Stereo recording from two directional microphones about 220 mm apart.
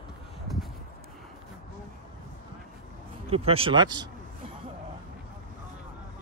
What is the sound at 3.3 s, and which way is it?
Speech, 25° right (ahead or behind).